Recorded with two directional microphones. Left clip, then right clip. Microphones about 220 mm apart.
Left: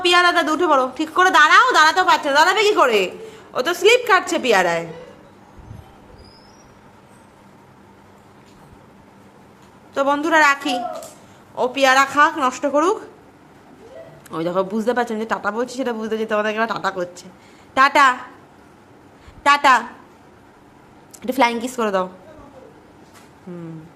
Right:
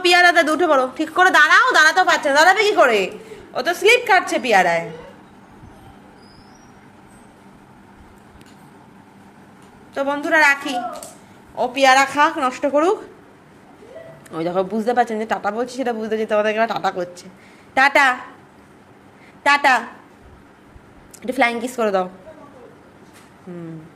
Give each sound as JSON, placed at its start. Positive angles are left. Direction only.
{"t": 0.0, "sound": "a woman's voice", "side_deg": -5}
{"t": 9.9, "sound": "a woman's voice", "side_deg": 20}
{"t": 14.3, "sound": "a woman's voice", "side_deg": 5}
{"t": 19.4, "sound": "a woman's voice", "side_deg": 10}
{"t": 21.2, "sound": "speech", "side_deg": 10}